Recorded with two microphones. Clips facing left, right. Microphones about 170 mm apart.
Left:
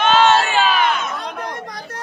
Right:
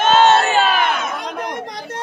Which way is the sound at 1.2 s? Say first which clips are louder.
Right 2 dB; 20° right (ahead or behind).